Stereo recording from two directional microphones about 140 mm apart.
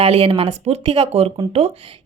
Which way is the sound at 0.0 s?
40° right (ahead or behind).